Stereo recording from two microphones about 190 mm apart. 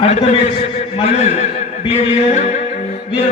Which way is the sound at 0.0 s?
35° left (ahead or behind).